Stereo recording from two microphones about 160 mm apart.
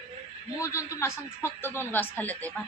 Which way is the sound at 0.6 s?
20° left (ahead or behind).